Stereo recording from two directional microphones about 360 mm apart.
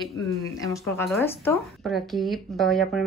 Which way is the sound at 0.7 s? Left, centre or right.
Centre.